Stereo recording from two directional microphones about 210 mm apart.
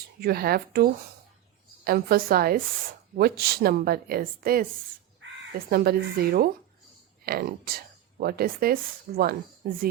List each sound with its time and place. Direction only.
0.2 s a woman's voice: 45° right (ahead or behind)
5.2 s crow: 60° right (ahead or behind)
5.7 s a woman's voice: 45° right (ahead or behind)